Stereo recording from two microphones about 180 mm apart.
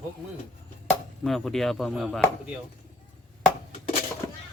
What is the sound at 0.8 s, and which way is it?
Chop, centre (ahead or behind).